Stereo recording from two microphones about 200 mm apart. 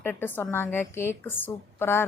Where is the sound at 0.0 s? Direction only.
10° left (ahead or behind).